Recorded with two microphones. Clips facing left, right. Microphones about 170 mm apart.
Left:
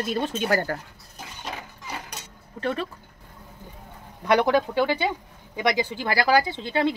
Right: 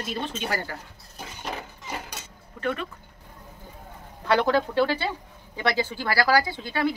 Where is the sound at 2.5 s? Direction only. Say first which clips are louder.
Left 1 dB; 35° left (ahead or behind).